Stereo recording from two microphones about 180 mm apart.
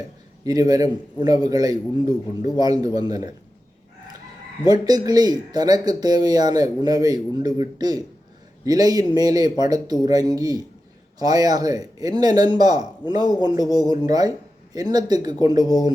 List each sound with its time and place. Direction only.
0.4 s a man's voice: 20° right (ahead or behind)
4.6 s a man's voice: 20° right (ahead or behind)